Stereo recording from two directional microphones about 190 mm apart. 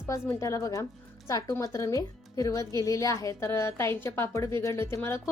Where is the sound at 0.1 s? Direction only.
15° left (ahead or behind).